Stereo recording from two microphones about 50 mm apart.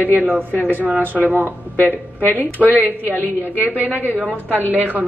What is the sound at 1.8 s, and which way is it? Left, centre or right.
Speech, left.